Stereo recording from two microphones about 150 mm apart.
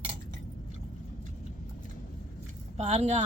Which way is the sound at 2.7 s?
45° right (ahead or behind).